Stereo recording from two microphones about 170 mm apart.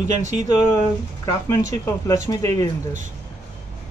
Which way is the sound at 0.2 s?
45° right (ahead or behind).